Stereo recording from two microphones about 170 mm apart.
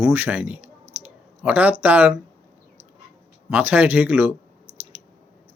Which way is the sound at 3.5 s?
10° right (ahead or behind).